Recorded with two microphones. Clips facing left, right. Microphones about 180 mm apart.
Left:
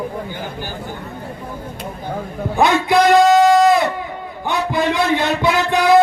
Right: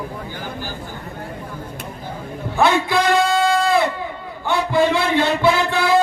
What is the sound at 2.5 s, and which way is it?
Music, 15° left (ahead or behind).